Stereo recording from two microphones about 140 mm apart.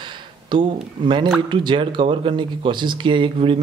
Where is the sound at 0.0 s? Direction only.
35° right (ahead or behind).